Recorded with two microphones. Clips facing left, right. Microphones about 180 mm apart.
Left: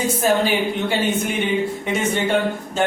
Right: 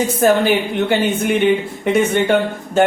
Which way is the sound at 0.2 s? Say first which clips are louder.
Right 5 dB; 60° right (ahead or behind).